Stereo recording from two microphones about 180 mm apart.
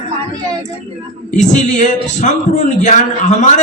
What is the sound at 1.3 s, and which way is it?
A man's voice, 45° left (ahead or behind).